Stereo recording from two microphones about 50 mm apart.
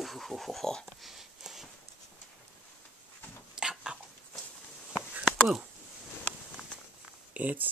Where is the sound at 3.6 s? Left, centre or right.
Centre.